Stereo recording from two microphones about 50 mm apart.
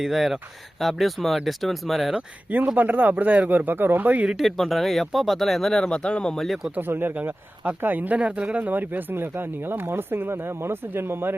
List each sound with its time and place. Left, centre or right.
0.0 s speech: centre
2.5 s speech: right
3.5 s speech: right
4.4 s speech: centre
6.7 s speech: right